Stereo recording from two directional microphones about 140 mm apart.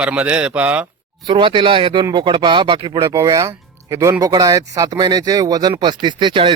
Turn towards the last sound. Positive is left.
turn(degrees=-35)  # may be behind; listen again after turning